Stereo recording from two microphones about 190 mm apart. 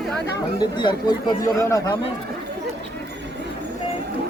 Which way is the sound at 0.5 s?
25° left (ahead or behind).